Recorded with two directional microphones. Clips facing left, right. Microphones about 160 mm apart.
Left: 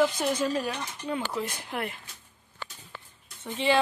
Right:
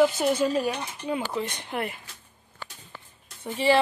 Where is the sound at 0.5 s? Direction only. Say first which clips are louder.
Right 4 dB; 20° right (ahead or behind).